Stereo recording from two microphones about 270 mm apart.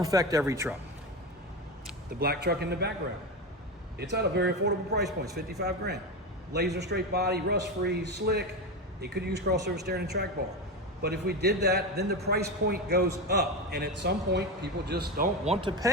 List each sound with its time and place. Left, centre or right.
0.0 s speech: centre
2.1 s a man's voice: right
3.9 s a man's voice: right
15.4 s speech: centre